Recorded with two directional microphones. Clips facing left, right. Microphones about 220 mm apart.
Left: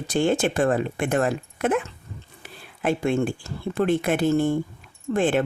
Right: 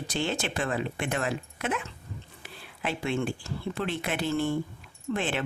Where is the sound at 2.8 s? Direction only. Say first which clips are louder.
Left 7 dB; 45° left (ahead or behind).